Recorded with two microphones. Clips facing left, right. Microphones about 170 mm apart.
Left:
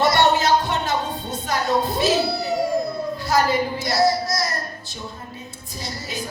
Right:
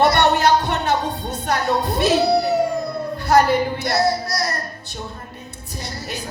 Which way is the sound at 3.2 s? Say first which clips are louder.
Right 5 dB; 60° right (ahead or behind).